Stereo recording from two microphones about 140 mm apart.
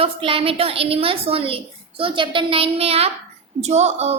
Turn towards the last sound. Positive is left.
turn(degrees=-50)  # may be behind; listen again after turning